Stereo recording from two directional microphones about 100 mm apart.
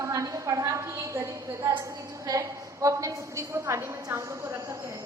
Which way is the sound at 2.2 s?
35° right (ahead or behind).